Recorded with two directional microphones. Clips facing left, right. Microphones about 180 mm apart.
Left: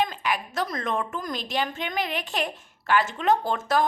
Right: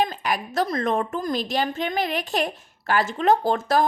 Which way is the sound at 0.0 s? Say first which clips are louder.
Right 2 dB; 40° right (ahead or behind).